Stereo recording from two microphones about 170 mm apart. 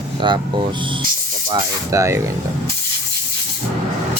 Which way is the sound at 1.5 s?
20° right (ahead or behind).